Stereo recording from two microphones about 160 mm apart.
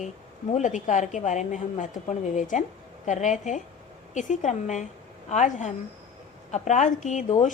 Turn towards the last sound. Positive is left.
turn(degrees=45)  # may be behind; listen again after turning